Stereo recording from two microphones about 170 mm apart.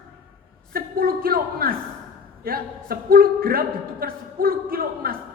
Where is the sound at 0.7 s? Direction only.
60° right (ahead or behind).